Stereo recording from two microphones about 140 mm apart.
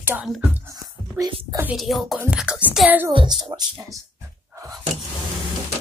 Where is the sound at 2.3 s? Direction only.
5° right (ahead or behind).